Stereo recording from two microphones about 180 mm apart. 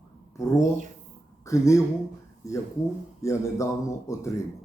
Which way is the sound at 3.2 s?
15° left (ahead or behind).